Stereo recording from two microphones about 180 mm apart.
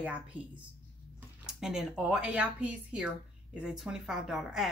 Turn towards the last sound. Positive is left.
turn(degrees=0)  # may be behind; listen again after turning